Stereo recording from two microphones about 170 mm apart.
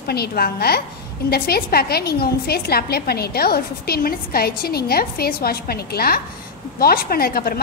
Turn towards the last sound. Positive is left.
turn(degrees=60)  # may be behind; listen again after turning